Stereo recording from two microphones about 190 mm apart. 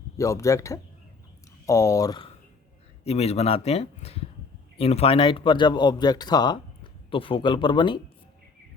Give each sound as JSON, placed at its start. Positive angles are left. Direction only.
{"t": 0.2, "sound": "speech", "side_deg": 15}
{"t": 3.0, "sound": "speech", "side_deg": 35}